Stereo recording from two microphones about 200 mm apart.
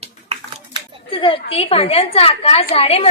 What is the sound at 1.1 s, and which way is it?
Speech, 25° left (ahead or behind).